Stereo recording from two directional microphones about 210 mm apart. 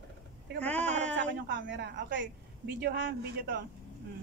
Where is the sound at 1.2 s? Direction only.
60° right (ahead or behind).